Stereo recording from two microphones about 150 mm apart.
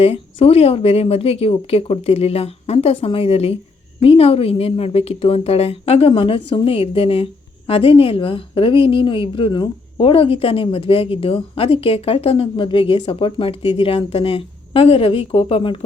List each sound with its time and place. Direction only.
0.0 s a woman's voice: 40° left (ahead or behind)